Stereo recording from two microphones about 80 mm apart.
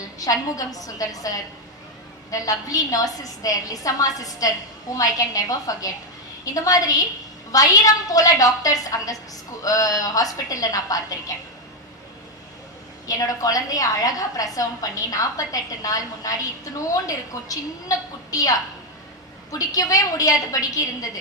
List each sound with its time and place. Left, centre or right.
0.0 s a woman's voice: left
13.1 s a woman's voice: left